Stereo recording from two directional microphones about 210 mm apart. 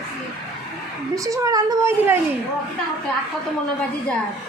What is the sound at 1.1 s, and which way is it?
Speech, 15° right (ahead or behind).